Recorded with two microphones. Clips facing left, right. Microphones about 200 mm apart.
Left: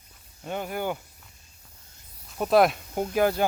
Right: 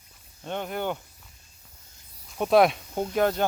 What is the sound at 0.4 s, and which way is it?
Speech, 5° left (ahead or behind).